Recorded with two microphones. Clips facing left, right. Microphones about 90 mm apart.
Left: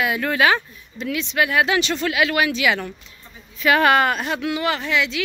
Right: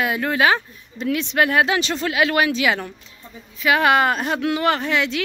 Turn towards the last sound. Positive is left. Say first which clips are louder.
# right 2 dB
turn(degrees=-40)  # may be behind; listen again after turning